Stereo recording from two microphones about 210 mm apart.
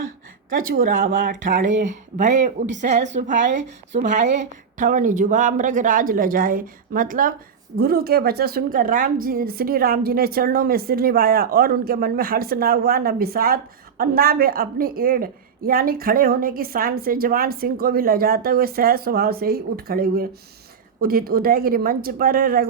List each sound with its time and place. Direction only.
0.7 s a woman's voice: 45° right (ahead or behind)